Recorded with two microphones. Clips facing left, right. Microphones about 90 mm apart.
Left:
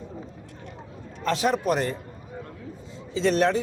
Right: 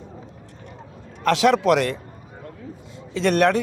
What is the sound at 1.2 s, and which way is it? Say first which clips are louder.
Speech: right 6 dB; 80° right.